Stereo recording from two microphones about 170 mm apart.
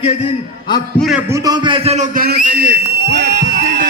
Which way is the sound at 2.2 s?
60° right (ahead or behind).